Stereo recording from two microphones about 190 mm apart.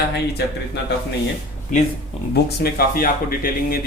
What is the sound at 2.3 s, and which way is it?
Speech, 50° left (ahead or behind).